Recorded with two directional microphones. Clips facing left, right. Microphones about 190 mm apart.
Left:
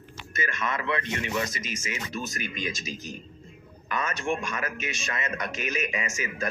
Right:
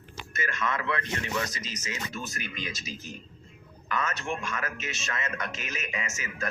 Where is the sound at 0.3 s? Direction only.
15° left (ahead or behind).